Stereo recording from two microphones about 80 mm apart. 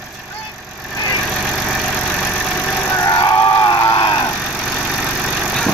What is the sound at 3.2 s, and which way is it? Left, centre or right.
Vehicle, left.